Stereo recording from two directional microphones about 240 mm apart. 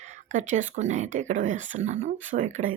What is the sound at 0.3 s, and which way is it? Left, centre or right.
Speech, right.